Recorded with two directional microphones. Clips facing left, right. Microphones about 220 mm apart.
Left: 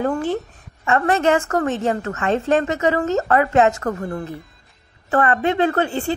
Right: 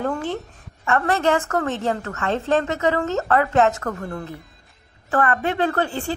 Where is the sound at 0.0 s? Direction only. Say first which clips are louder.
Left 4 dB; 10° left (ahead or behind).